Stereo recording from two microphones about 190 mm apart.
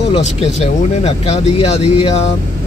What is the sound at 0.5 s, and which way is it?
Speech, 35° left (ahead or behind).